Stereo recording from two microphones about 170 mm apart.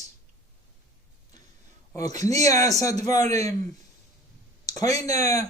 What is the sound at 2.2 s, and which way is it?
A man's voice, 20° left (ahead or behind).